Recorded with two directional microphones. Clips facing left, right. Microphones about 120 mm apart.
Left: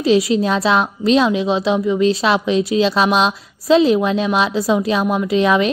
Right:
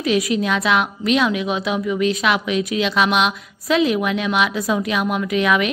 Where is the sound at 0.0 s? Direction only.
30° left (ahead or behind).